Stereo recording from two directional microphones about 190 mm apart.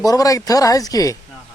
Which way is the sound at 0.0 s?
20° left (ahead or behind).